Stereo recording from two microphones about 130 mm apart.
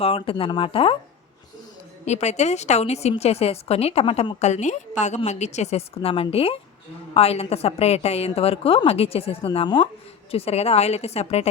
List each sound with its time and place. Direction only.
0.0 s a woman's voice: 45° left (ahead or behind)
2.0 s a woman's voice: 60° left (ahead or behind); by 9.9 s 35° left (ahead or behind)
10.3 s a woman's voice: 50° left (ahead or behind)